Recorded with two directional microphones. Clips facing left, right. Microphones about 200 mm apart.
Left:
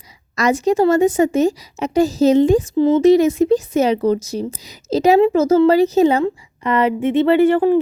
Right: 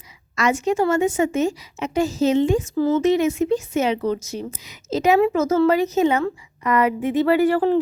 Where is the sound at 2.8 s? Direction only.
15° left (ahead or behind).